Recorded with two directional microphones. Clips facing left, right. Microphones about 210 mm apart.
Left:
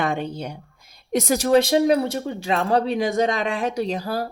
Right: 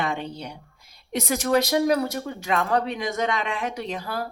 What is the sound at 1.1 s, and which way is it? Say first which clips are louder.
Speech: left 5 dB; 35° left (ahead or behind).